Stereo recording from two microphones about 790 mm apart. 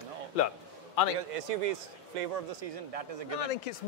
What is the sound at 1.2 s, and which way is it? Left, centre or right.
A man's voice, right.